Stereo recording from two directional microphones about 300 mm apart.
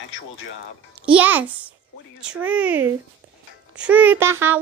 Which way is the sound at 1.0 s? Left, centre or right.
Centre.